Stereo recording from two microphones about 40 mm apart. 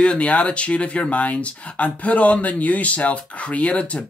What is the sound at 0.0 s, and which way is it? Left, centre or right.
Speech, left.